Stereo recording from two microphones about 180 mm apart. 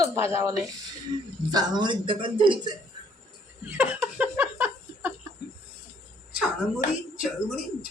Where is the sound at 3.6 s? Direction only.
10° right (ahead or behind).